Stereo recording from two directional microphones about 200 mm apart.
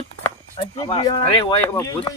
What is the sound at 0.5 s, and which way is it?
Speech, 25° left (ahead or behind).